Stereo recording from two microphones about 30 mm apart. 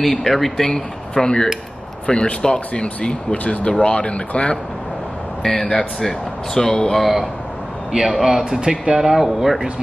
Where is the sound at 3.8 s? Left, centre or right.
Left.